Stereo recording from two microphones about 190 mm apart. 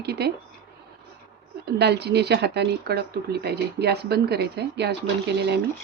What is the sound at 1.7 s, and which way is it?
Speech, 60° right (ahead or behind).